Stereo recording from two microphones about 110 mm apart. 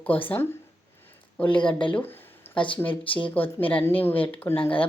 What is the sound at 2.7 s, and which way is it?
Speech, 15° left (ahead or behind).